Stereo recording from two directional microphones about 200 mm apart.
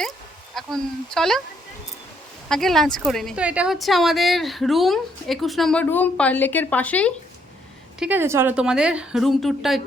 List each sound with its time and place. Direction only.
0.5 s a woman's voice: centre (ahead or behind)
2.5 s a woman's voice: centre (ahead or behind)
7.9 s a woman's voice: 5° right (ahead or behind)